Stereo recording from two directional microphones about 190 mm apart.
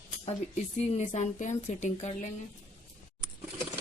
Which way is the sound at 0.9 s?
35° left (ahead or behind).